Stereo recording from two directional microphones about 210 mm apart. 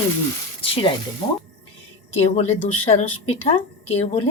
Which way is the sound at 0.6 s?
25° left (ahead or behind).